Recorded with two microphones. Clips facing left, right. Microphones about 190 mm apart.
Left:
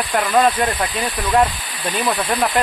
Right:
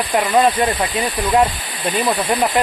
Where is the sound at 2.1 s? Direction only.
10° right (ahead or behind).